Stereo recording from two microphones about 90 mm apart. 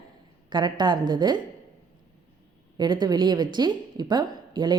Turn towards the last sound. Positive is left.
turn(degrees=-55)  # may be behind; listen again after turning